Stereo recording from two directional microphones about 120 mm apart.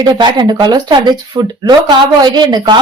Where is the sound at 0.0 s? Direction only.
40° right (ahead or behind).